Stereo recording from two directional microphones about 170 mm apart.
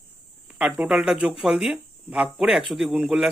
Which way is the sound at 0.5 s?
5° right (ahead or behind).